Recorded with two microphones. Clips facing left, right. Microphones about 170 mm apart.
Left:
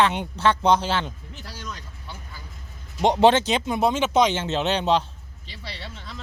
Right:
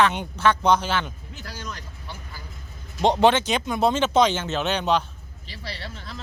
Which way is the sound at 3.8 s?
15° left (ahead or behind).